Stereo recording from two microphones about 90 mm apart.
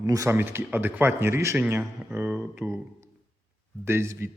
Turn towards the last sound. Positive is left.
turn(degrees=-30)  # may be behind; listen again after turning